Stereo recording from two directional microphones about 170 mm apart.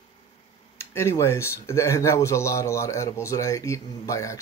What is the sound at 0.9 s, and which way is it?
Speech, 15° left (ahead or behind).